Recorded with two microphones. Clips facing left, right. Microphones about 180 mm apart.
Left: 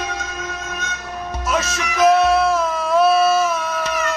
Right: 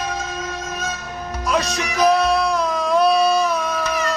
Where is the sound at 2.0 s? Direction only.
Centre (ahead or behind).